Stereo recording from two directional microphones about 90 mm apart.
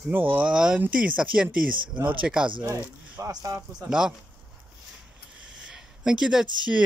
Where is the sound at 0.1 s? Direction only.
20° right (ahead or behind).